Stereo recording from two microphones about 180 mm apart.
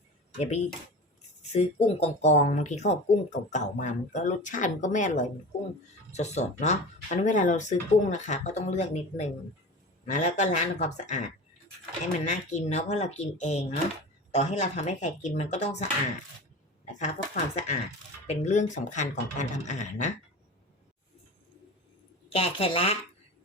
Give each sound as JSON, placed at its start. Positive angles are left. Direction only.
{"t": 1.5, "sound": "speech", "side_deg": 40}
{"t": 22.3, "sound": "speech", "side_deg": 35}